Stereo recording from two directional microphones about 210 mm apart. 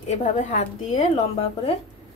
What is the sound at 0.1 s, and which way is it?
Speech, 35° left (ahead or behind).